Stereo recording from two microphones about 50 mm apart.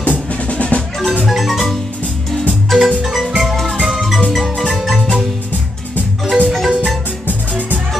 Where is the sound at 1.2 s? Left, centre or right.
Centre.